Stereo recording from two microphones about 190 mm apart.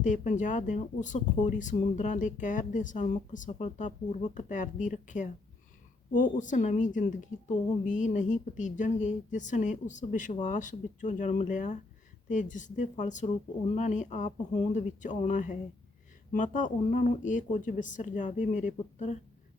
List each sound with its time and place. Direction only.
0.0 s speech: 40° left (ahead or behind)